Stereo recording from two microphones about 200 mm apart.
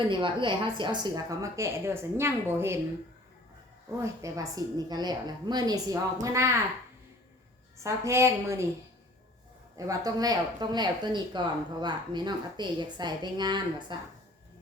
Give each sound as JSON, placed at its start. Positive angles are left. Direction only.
{"t": 0.1, "sound": "a woman's voice", "side_deg": -25}
{"t": 4.0, "sound": "a woman's voice", "side_deg": -15}
{"t": 7.9, "sound": "a woman's voice", "side_deg": -15}
{"t": 9.7, "sound": "speech", "side_deg": -15}